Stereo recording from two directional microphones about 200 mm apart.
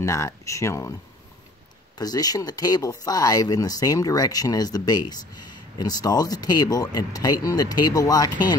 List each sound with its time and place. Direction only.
0.0 s speech: 15° left (ahead or behind)
2.0 s speech: 20° left (ahead or behind)